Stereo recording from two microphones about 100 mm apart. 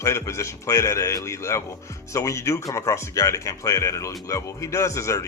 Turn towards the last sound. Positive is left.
turn(degrees=30)  # may be behind; listen again after turning